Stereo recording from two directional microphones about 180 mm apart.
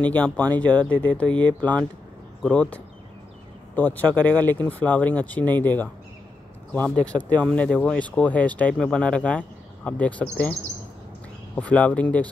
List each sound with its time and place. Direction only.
0.0 s speech: 10° left (ahead or behind)
7.2 s speech: 20° right (ahead or behind)
7.4 s speech: 5° left (ahead or behind)